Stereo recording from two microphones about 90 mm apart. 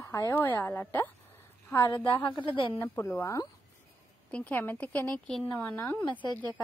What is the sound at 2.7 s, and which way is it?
Speech, 25° left (ahead or behind).